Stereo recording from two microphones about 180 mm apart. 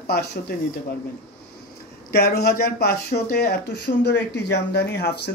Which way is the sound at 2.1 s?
60° left (ahead or behind).